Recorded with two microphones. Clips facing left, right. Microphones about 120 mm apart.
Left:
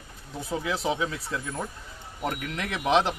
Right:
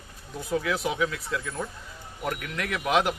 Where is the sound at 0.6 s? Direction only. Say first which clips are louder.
Left 2 dB; 30° left (ahead or behind).